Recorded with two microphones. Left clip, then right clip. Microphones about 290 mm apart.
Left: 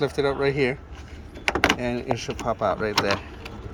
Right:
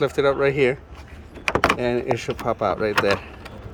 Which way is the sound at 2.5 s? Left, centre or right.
Right.